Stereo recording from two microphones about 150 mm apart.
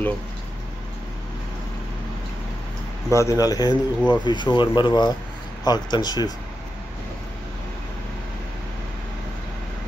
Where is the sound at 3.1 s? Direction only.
20° left (ahead or behind).